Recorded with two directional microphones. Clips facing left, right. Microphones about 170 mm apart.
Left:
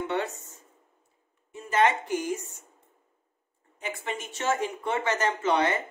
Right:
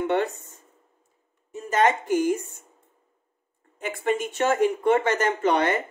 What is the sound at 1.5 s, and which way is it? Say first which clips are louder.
A woman's voice: right 2 dB; 40° right (ahead or behind).